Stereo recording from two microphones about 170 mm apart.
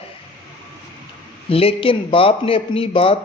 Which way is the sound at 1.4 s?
35° left (ahead or behind).